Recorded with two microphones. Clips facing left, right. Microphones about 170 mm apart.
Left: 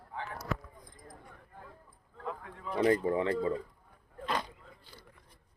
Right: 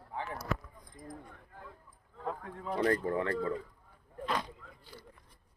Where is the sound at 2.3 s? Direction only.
35° right (ahead or behind).